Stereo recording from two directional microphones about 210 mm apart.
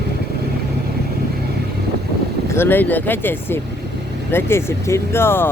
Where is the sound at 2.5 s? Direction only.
10° left (ahead or behind).